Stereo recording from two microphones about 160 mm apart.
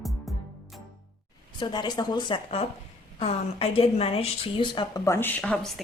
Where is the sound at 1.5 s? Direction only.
25° left (ahead or behind).